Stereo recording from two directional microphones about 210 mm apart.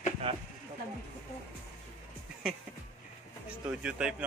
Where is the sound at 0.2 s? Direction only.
25° right (ahead or behind).